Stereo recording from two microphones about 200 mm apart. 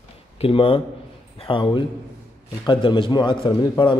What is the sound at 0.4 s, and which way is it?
A man's voice, 25° left (ahead or behind).